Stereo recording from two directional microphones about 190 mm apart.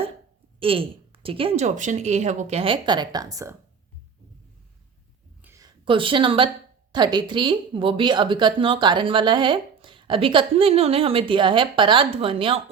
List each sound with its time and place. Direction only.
0.6 s a woman's voice: 30° right (ahead or behind)
5.4 s a sound: 15° right (ahead or behind)
6.9 s a woman's voice: 25° right (ahead or behind)